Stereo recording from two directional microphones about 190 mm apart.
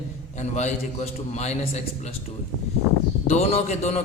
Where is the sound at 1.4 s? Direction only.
35° left (ahead or behind).